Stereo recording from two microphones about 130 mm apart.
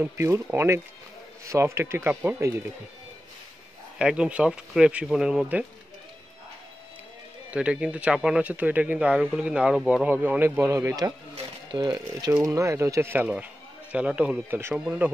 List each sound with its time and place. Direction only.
0.0 s speech: 20° right (ahead or behind)
4.0 s speech: 5° right (ahead or behind)
7.5 s speech: 10° right (ahead or behind); by 11.1 s 25° right (ahead or behind)
11.3 s speech: 35° right (ahead or behind); by 14.8 s 20° right (ahead or behind)